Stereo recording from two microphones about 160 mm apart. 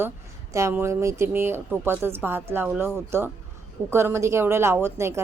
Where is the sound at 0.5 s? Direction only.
15° right (ahead or behind).